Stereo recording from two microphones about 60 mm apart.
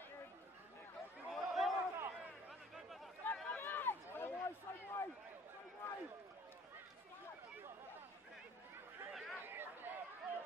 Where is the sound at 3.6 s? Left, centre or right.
Left.